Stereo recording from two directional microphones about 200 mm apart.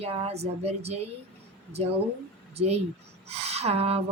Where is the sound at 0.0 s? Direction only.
30° right (ahead or behind).